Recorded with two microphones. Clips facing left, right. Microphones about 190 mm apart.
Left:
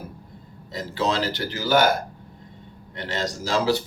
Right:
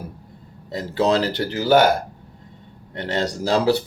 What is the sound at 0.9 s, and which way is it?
Speech, 60° right (ahead or behind).